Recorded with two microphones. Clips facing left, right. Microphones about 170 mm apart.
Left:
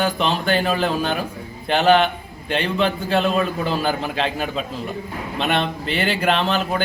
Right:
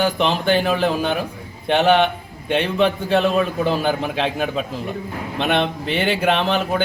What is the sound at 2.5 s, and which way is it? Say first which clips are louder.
A man's voice: right 3 dB; 15° right (ahead or behind).